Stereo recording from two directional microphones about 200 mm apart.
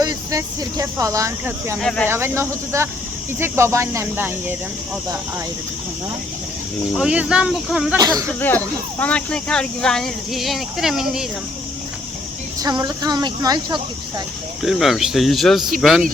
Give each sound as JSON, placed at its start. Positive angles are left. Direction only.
{"t": 0.0, "sound": "speech", "side_deg": -20}
{"t": 1.8, "sound": "speech", "side_deg": 5}
{"t": 2.0, "sound": "speech", "side_deg": -10}
{"t": 6.9, "sound": "speech", "side_deg": -5}
{"t": 7.9, "sound": "speech", "side_deg": -15}
{"t": 8.3, "sound": "speech", "side_deg": 10}
{"t": 12.5, "sound": "speech", "side_deg": -20}
{"t": 14.6, "sound": "speech", "side_deg": 0}